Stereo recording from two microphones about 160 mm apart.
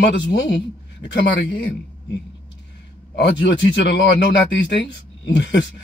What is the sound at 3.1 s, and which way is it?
A man's voice, 90° left.